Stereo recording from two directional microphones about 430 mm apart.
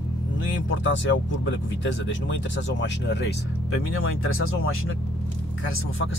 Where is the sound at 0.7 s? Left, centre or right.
Left.